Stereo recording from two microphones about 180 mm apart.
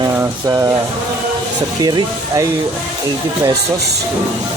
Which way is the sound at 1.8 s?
25° right (ahead or behind).